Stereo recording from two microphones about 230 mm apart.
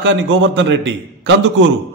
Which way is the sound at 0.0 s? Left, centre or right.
Right.